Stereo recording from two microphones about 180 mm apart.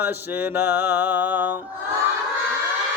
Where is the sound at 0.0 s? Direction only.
10° right (ahead or behind).